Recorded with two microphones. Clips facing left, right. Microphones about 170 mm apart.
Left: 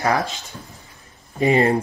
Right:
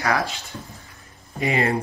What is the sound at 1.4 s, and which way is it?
Speech, 35° left (ahead or behind).